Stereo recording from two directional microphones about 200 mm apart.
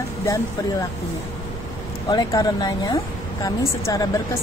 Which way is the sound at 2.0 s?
20° left (ahead or behind).